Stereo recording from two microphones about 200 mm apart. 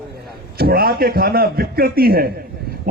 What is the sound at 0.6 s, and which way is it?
A man's voice, 50° right (ahead or behind).